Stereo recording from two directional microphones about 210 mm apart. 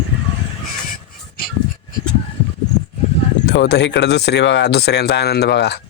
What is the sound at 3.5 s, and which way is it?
Speech, 55° left (ahead or behind).